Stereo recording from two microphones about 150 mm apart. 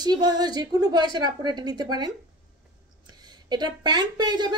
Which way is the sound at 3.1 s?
30° right (ahead or behind).